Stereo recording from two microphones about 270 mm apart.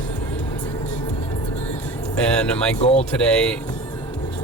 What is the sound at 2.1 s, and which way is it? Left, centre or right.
Speech, centre.